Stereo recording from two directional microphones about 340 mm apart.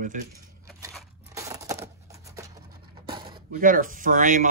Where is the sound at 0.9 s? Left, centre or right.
Centre.